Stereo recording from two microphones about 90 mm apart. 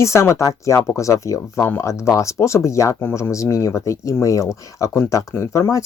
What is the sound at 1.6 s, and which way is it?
Speech, 20° left (ahead or behind).